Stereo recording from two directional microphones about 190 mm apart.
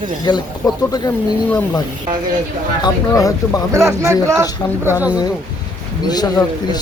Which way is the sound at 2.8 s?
20° left (ahead or behind).